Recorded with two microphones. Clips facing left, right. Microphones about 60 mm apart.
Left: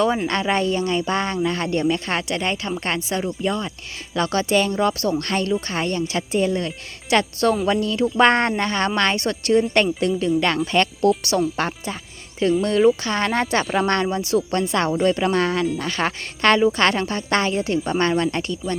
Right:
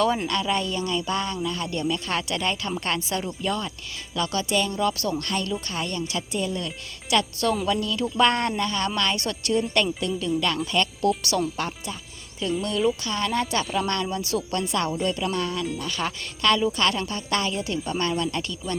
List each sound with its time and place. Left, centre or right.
0.0 s speech: left
0.3 s speech: left; by 3.7 s centre
4.1 s speech: left
5.2 s speech: left
5.5 s speech: left
11.2 s speech: left
11.5 s speech: left
14.2 s speech: left
14.7 s speech: left